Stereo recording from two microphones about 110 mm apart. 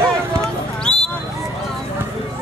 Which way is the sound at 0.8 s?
5° left (ahead or behind).